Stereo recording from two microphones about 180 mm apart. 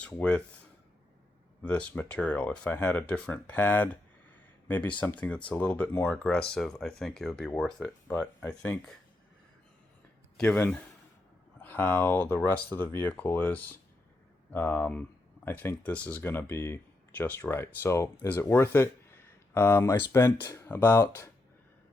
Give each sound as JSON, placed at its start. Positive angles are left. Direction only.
{"t": 0.0, "sound": "speech", "side_deg": 5}
{"t": 1.6, "sound": "speech", "side_deg": 5}
{"t": 10.3, "sound": "speech", "side_deg": 10}